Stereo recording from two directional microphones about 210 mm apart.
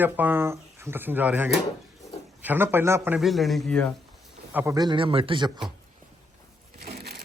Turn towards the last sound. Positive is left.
turn(degrees=-50)  # may be behind; listen again after turning